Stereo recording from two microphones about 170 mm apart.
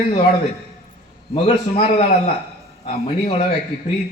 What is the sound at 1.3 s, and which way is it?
Speech, 40° left (ahead or behind).